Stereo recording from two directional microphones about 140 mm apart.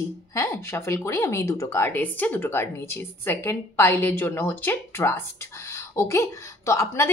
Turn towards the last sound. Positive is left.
turn(degrees=20)  # may be behind; listen again after turning